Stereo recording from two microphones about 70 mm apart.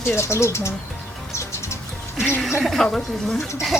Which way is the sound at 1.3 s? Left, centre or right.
Left.